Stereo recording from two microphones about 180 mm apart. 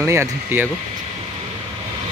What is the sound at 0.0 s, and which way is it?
Speech, 15° right (ahead or behind).